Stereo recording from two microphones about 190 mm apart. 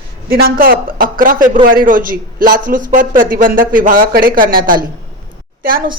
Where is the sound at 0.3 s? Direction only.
50° right (ahead or behind).